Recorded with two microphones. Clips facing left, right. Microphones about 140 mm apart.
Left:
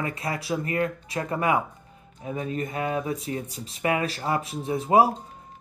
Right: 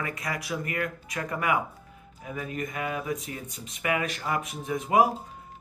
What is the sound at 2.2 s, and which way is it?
Music, 30° left (ahead or behind).